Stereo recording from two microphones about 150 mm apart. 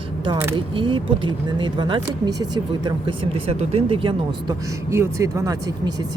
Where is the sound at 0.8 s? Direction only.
35° right (ahead or behind).